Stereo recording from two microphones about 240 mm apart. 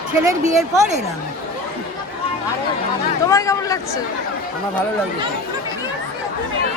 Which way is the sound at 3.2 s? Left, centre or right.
Centre.